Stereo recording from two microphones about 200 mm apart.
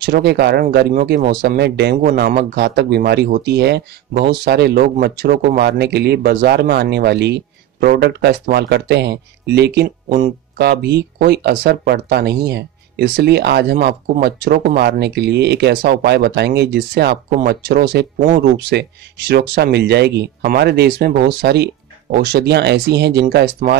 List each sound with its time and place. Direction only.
0.0 s speech: 55° right (ahead or behind)